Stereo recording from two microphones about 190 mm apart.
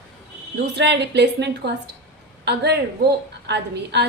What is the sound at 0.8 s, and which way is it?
A woman's voice, 65° right (ahead or behind).